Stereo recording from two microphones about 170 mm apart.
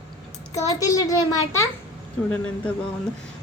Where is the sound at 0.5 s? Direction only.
20° left (ahead or behind).